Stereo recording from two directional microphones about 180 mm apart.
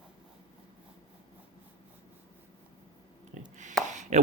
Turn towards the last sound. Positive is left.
turn(degrees=-40)  # may be behind; listen again after turning